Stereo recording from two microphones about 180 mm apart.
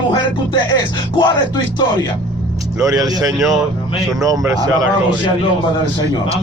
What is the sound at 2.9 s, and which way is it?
Speech, 20° right (ahead or behind).